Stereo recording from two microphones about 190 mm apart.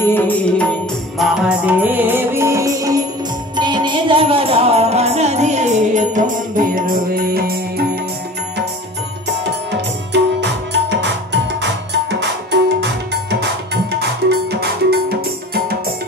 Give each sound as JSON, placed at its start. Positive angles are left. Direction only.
{"t": 0.1, "sound": "music", "side_deg": 10}
{"t": 9.4, "sound": "tabla", "side_deg": -65}
{"t": 13.9, "sound": "music", "side_deg": -60}